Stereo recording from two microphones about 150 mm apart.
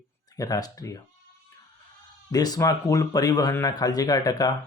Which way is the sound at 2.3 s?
25° left (ahead or behind).